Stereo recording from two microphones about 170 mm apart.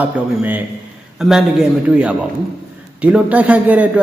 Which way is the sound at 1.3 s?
5° right (ahead or behind).